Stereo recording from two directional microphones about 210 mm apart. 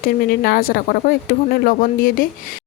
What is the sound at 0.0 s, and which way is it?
Speech, 45° left (ahead or behind).